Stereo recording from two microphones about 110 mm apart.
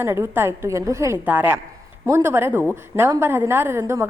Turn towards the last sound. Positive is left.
turn(degrees=-25)  # may be behind; listen again after turning